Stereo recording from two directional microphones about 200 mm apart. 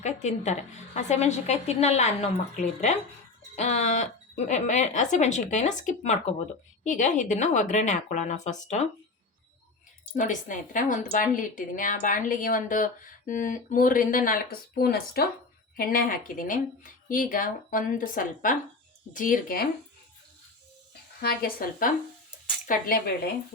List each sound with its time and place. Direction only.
0.0 s a woman's voice: 35° left (ahead or behind)
10.2 s a woman's voice: 40° left (ahead or behind)
21.2 s speech: 50° left (ahead or behind)